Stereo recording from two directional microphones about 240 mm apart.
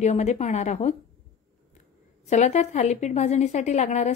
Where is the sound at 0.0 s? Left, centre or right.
Left.